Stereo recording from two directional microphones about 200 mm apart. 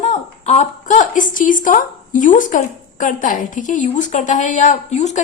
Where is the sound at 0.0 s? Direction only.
35° left (ahead or behind).